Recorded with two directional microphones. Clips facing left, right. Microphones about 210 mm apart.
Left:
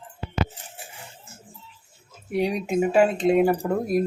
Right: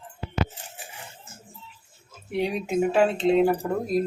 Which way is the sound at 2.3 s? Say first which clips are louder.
Left 2 dB; 5° left (ahead or behind).